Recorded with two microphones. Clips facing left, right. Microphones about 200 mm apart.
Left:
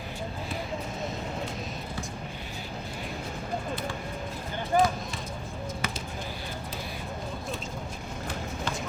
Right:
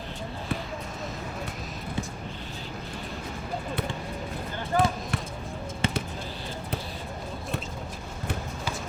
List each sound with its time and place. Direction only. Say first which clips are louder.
4.7 s basketball bounce: left 1 dB; 15° left (ahead or behind)
5.8 s basketball bounce: right 9 dB; 30° right (ahead or behind)